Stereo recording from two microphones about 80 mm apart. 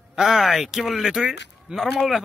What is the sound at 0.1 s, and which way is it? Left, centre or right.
A man's voice, centre.